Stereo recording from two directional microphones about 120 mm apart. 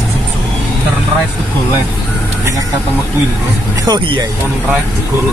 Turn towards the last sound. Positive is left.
turn(degrees=-35)  # may be behind; listen again after turning